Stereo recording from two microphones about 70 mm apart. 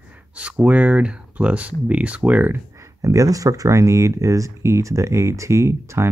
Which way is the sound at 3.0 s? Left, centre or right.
Right.